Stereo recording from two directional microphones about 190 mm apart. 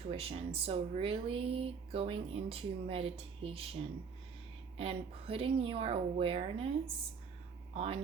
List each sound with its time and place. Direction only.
0.1 s speech: 30° right (ahead or behind)
4.8 s speech: 30° right (ahead or behind)